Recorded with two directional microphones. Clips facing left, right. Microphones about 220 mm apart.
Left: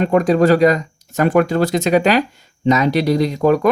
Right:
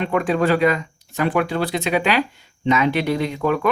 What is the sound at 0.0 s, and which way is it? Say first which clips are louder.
Speech: left 6 dB; 40° left (ahead or behind).